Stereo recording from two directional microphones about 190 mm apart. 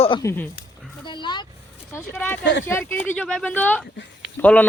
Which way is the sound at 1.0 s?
25° left (ahead or behind).